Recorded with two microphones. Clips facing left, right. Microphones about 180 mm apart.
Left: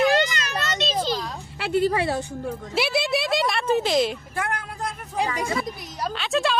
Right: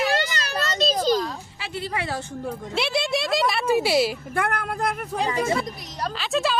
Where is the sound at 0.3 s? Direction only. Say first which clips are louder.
Right 2 dB; 35° right (ahead or behind).